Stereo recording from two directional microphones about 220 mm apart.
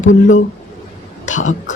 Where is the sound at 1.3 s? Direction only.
35° left (ahead or behind).